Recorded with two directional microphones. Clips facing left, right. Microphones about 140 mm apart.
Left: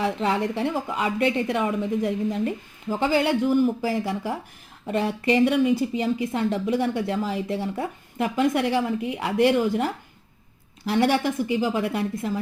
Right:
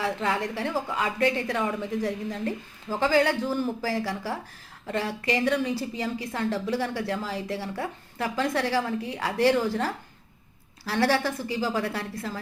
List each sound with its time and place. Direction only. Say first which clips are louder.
0.0 s a woman's voice: left 4 dB; 20° left (ahead or behind)